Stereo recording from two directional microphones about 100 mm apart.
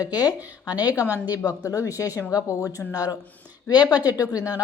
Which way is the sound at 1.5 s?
30° left (ahead or behind).